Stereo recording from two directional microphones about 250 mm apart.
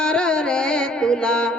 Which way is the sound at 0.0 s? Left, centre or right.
Centre.